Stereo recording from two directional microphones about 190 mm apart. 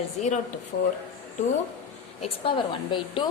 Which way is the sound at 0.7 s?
55° left (ahead or behind).